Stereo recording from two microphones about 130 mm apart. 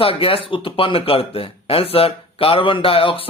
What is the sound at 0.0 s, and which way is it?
Speech, 45° left (ahead or behind).